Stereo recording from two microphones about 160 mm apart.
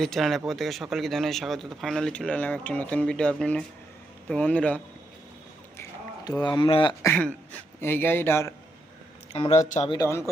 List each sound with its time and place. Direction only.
0.0 s a man's voice: centre (ahead or behind)
5.7 s a sound: 20° left (ahead or behind)
7.0 s a man's voice: 15° left (ahead or behind)
9.3 s speech: 40° left (ahead or behind)
9.6 s speech: 50° left (ahead or behind)
9.9 s speech: 20° left (ahead or behind)